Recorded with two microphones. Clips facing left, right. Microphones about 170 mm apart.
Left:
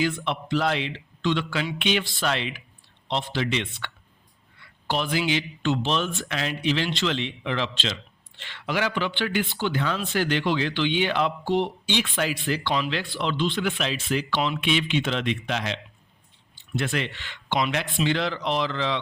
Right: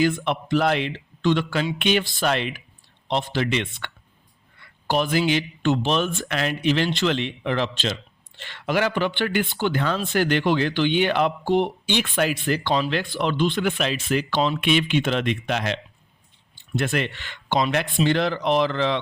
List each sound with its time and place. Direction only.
0.0 s speech: 50° right (ahead or behind)